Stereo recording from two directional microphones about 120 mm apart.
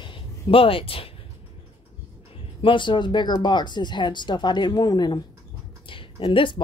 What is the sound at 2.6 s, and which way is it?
A woman's voice, 45° left (ahead or behind).